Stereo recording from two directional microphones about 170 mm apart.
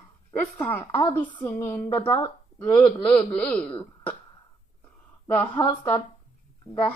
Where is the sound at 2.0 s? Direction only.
25° left (ahead or behind).